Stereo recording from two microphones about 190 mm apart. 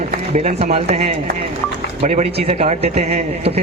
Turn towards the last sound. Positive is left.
turn(degrees=-35)  # may be behind; listen again after turning